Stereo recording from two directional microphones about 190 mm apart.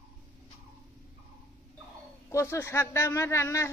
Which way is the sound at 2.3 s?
15° left (ahead or behind).